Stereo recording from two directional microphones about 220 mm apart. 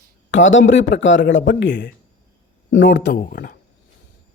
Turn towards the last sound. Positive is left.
turn(degrees=40)  # may be behind; listen again after turning